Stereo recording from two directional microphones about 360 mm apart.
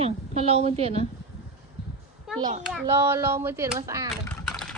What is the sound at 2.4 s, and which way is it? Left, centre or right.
Speech, centre.